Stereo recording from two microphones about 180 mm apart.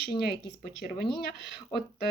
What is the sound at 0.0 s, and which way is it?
Speech, 60° left (ahead or behind).